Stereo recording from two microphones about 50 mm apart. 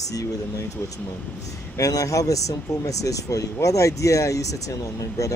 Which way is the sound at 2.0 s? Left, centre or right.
Left.